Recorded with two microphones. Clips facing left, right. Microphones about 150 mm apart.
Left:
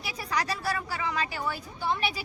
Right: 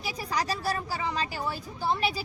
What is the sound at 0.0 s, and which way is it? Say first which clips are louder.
Speech: right 1 dB; 35° right (ahead or behind).